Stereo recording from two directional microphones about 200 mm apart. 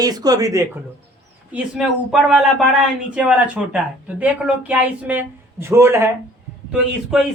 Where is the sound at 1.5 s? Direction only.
Centre (ahead or behind).